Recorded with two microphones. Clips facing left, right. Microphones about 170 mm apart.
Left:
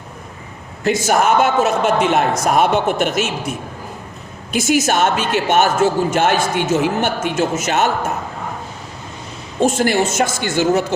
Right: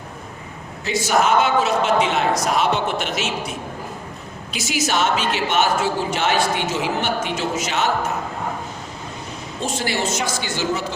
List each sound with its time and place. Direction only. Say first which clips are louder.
0.9 s a woman's voice: left 3 dB; 50° left (ahead or behind)
4.5 s a woman's voice: left 7 dB; 50° left (ahead or behind)
9.6 s a woman's voice: left 9 dB; 50° left (ahead or behind)